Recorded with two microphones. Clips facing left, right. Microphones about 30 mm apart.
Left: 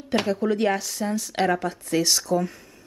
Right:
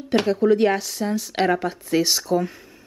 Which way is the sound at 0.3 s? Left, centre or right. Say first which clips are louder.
Right 6 dB; centre.